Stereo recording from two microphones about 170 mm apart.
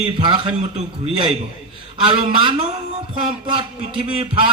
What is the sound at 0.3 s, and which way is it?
Speech, 30° right (ahead or behind).